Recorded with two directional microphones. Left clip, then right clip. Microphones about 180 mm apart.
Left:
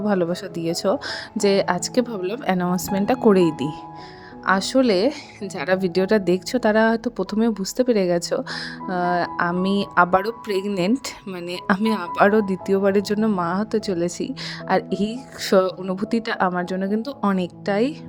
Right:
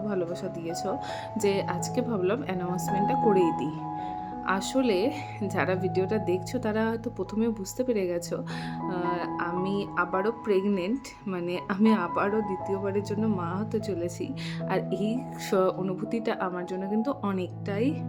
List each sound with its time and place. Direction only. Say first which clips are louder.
0.0 s speech: left 8 dB; 50° left (ahead or behind)